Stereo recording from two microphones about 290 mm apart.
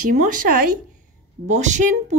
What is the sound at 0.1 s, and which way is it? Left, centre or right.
A woman's voice, right.